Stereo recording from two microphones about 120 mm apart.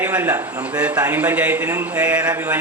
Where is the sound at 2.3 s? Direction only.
20° right (ahead or behind).